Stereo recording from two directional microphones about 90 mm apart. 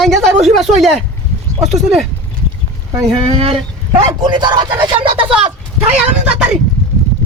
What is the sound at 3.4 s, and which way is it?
Speech, 75° right (ahead or behind).